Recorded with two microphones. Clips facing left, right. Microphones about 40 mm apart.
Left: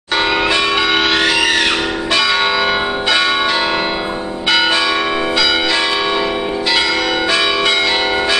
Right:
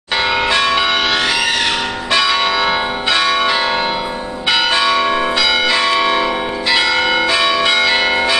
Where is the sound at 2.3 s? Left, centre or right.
Centre.